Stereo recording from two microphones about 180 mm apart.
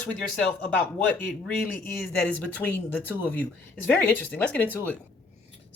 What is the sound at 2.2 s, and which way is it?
Speech, 10° left (ahead or behind).